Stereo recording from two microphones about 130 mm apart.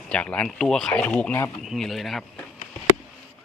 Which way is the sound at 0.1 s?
10° left (ahead or behind).